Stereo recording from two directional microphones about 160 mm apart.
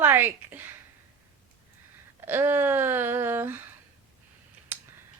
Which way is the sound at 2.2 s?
15° right (ahead or behind).